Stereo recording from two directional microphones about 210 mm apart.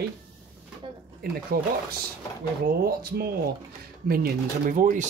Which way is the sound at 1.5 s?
45° right (ahead or behind).